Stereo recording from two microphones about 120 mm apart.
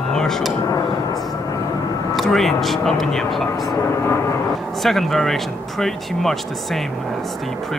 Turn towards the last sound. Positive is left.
turn(degrees=0)  # may be behind; listen again after turning